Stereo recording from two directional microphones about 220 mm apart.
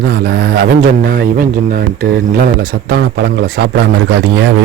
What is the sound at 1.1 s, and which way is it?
Speech, 40° right (ahead or behind).